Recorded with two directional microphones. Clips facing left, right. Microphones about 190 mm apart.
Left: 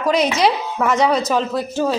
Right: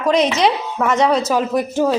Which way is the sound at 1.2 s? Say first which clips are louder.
Right 2 dB; 10° right (ahead or behind).